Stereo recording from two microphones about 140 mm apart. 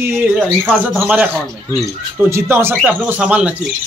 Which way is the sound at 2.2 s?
20° right (ahead or behind).